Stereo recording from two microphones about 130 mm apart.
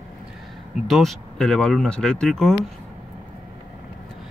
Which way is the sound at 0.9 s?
Centre (ahead or behind).